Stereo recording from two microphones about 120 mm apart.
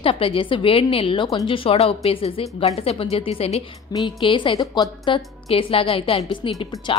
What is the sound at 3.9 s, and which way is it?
A woman's voice, 40° left (ahead or behind).